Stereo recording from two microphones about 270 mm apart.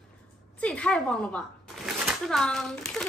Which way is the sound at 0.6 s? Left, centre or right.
Centre.